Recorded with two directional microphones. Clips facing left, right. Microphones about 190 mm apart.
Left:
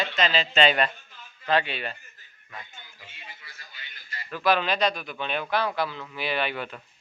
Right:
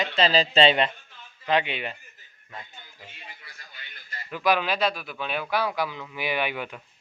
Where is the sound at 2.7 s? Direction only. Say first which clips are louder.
Right 2 dB; 45° right (ahead or behind).